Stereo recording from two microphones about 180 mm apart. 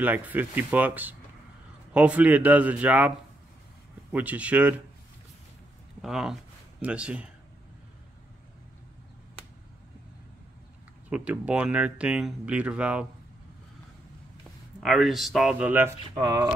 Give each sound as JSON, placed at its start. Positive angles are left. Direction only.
{"t": 0.0, "sound": "speech", "side_deg": -10}
{"t": 4.1, "sound": "speech", "side_deg": -10}
{"t": 6.0, "sound": "speech", "side_deg": -5}
{"t": 11.1, "sound": "speech", "side_deg": -5}
{"t": 14.8, "sound": "speech", "side_deg": 0}
{"t": 16.2, "sound": "speech", "side_deg": -20}